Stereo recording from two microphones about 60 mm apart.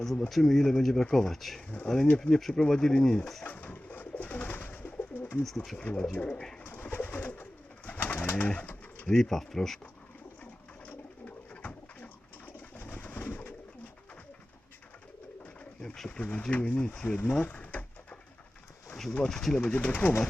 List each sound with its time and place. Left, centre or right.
0.0 s speech: centre
3.4 s bird: left
5.4 s speech: centre
5.8 s speech: left
6.6 s bird: left
9.0 s speech: centre
10.4 s bird: left
16.0 s speech: left
17.4 s pigeon: left
19.1 s speech: centre
19.6 s speech: left